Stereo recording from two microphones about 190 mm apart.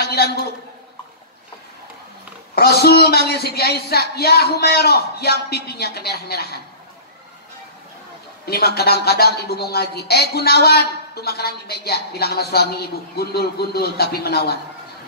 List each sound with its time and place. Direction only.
0.0 s a sound: 55° left (ahead or behind)
2.5 s a man's voice: 55° left (ahead or behind)
8.5 s a man's voice: 55° left (ahead or behind)